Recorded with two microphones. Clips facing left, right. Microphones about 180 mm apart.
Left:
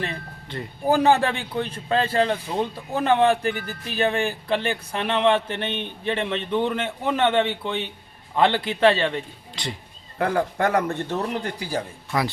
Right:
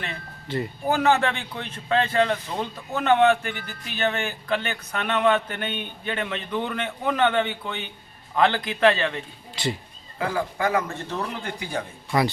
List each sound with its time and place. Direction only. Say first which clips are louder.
0.4 s speech: right 7 dB; 5° right (ahead or behind)
0.9 s a man's voice: left 3 dB; 35° left (ahead or behind)
10.2 s speech: left 4 dB; 60° left (ahead or behind)
12.1 s speech: right 2 dB; centre (ahead or behind)